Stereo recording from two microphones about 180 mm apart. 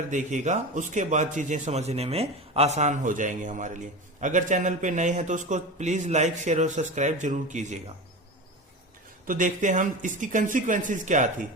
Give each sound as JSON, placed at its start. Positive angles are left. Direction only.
{"t": 0.1, "sound": "a man's voice", "side_deg": -45}
{"t": 9.2, "sound": "a man's voice", "side_deg": -50}